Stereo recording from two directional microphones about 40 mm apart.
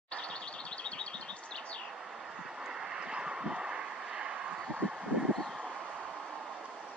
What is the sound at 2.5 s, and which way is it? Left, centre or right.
Vehicle, centre.